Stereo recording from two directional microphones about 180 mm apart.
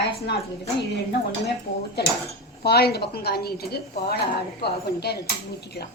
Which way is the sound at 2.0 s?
65° left (ahead or behind).